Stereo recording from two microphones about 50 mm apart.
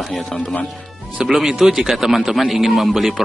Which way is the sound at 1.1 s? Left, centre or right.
Centre.